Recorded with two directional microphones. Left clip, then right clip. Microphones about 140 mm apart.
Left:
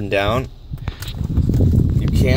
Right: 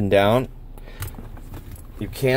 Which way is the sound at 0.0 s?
35° right (ahead or behind).